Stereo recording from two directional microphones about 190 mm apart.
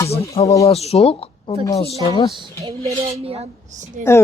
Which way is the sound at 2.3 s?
25° right (ahead or behind).